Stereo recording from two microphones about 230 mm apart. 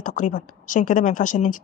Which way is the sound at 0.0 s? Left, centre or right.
Left.